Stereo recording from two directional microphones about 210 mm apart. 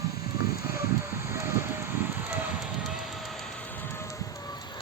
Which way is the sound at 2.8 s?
Centre (ahead or behind).